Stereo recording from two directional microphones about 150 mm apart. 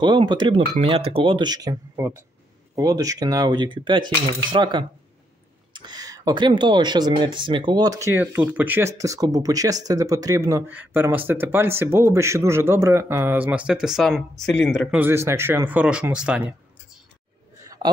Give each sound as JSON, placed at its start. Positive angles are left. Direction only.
{"t": 0.0, "sound": "speech", "side_deg": -30}
{"t": 14.9, "sound": "speech", "side_deg": -15}